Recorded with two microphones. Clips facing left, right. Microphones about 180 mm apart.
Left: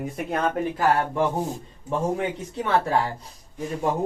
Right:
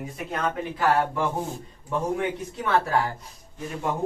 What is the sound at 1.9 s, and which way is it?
Speech, 30° left (ahead or behind).